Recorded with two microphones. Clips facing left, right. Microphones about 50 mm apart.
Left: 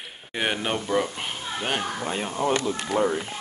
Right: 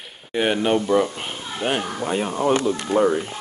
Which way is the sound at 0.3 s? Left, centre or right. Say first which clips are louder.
Right 7 dB; centre.